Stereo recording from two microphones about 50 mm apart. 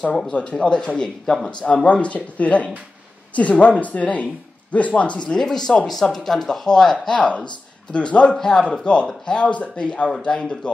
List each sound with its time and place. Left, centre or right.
0.3 s speech: left
5.5 s speech: centre
7.2 s speech: left